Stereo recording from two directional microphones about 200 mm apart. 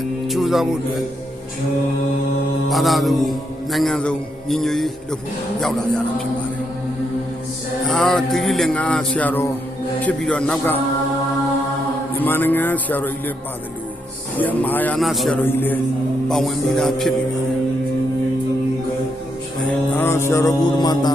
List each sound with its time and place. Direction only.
0.3 s music: centre (ahead or behind)
2.6 s music: centre (ahead or behind)
7.9 s music: 5° left (ahead or behind)
12.2 s a man's voice: 10° left (ahead or behind)
14.3 s a man's voice: 10° left (ahead or behind)
16.3 s music: centre (ahead or behind)
20.0 s a man's voice: 10° left (ahead or behind)